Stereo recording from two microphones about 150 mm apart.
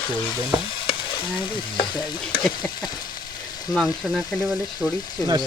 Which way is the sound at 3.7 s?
5° left (ahead or behind).